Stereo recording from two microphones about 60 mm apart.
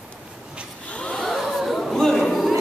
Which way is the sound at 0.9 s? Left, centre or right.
Centre.